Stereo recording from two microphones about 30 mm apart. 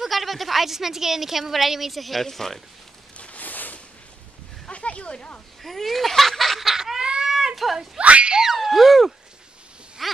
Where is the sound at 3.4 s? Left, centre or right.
Left.